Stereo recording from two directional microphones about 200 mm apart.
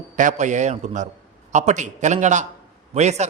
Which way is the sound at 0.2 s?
40° right (ahead or behind).